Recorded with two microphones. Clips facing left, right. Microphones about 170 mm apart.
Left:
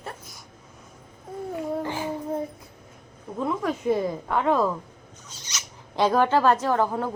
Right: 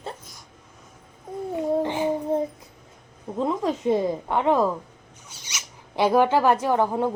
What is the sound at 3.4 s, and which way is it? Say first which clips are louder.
A woman's voice: right 2 dB; 20° right (ahead or behind).